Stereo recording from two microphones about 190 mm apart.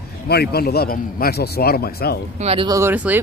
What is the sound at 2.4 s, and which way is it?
Speech, 30° right (ahead or behind).